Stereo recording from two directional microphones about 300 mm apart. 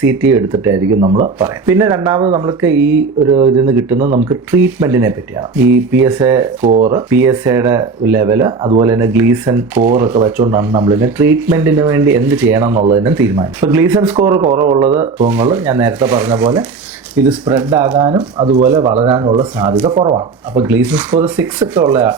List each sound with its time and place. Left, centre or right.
0.0 s speech: centre
3.9 s speech: right
4.5 s speech: centre
6.7 s speech: right
6.9 s speech: centre